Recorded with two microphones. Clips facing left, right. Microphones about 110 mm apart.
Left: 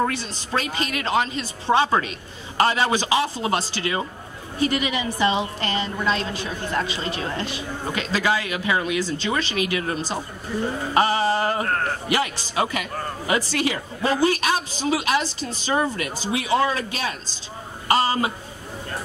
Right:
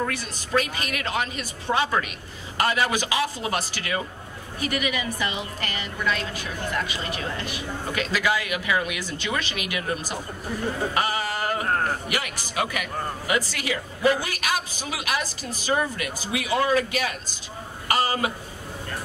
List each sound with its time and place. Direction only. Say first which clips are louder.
0.0 s a woman's voice: left 4 dB; 30° left (ahead or behind)
11.0 s music: left 11 dB; 30° left (ahead or behind)
12.1 s a woman's voice: left 6 dB; 30° left (ahead or behind)